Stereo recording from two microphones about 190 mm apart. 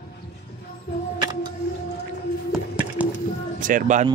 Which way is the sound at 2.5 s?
5° right (ahead or behind).